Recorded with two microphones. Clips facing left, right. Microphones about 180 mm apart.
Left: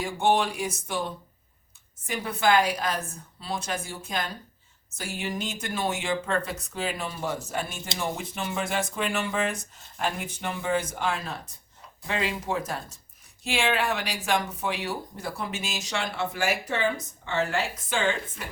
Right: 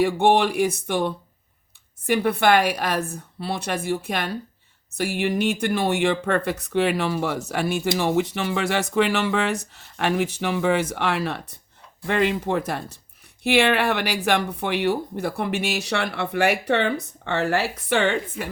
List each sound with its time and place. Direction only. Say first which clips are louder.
0.0 s speech: right 6 dB; 65° right (ahead or behind)
12.0 s speech: right 7 dB; 60° right (ahead or behind)